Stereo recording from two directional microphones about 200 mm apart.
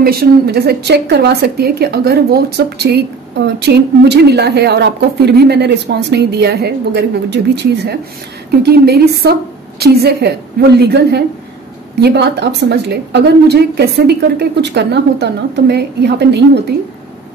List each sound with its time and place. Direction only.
0.0 s a woman's voice: 50° right (ahead or behind)